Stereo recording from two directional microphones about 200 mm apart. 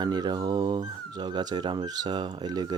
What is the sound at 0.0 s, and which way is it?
Speech, 20° right (ahead or behind).